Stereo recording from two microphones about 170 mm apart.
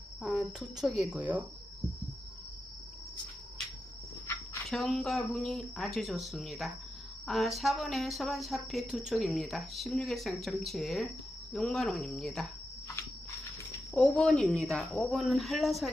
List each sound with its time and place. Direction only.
0.2 s speech: centre (ahead or behind)
4.7 s speech: centre (ahead or behind)
13.9 s speech: 5° left (ahead or behind)